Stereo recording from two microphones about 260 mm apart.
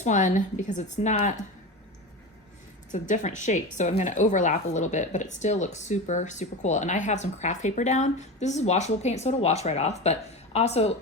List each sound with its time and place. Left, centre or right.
0.0 s speech: left
2.9 s speech: left